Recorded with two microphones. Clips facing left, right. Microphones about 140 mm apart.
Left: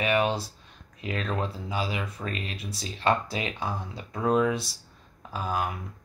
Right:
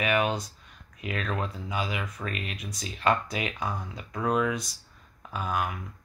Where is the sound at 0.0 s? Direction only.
30° left (ahead or behind).